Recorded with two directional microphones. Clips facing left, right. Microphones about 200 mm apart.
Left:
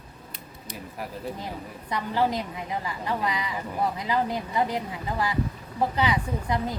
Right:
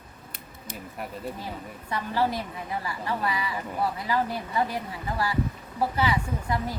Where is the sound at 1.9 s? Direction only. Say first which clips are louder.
Left 1 dB; 15° left (ahead or behind).